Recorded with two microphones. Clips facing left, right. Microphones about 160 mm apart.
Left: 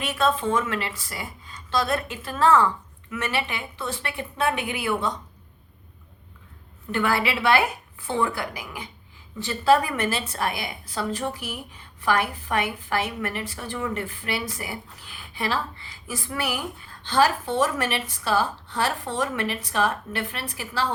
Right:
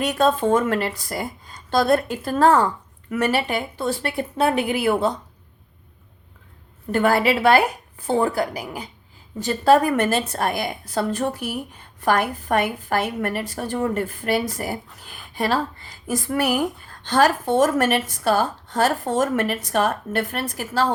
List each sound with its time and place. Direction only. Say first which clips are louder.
0.1 s a woman's voice: right 3 dB; 40° right (ahead or behind)
6.9 s a woman's voice: right 6 dB; 45° right (ahead or behind)